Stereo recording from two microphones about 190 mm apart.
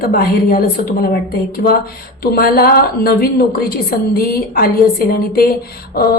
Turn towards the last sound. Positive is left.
turn(degrees=55)  # may be behind; listen again after turning